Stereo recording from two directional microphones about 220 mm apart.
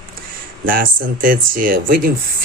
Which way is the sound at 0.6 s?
40° right (ahead or behind).